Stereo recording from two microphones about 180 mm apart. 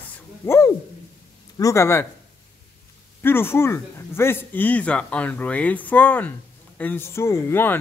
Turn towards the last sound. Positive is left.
turn(degrees=15)  # may be behind; listen again after turning